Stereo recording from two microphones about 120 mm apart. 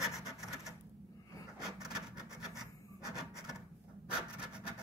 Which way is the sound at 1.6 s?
5° right (ahead or behind).